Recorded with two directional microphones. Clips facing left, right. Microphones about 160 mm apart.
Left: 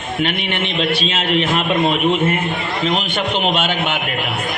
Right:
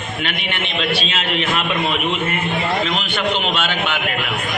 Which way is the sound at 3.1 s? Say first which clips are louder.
Left 2 dB; 45° left (ahead or behind).